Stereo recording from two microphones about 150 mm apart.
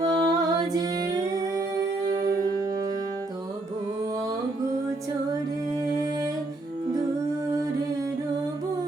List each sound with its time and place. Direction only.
0.0 s music: 25° right (ahead or behind)